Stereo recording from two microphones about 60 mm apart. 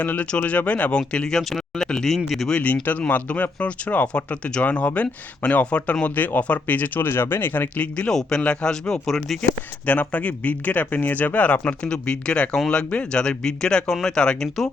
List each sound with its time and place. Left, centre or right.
0.0 s speech: left; by 2.5 s centre
3.1 s speech: left; by 9.4 s centre
9.4 s speech: left; by 12.8 s centre
12.9 s speech: centre